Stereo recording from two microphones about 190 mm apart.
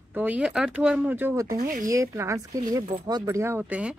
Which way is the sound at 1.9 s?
15° right (ahead or behind).